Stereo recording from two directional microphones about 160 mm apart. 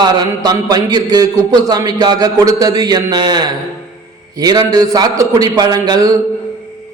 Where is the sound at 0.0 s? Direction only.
25° right (ahead or behind).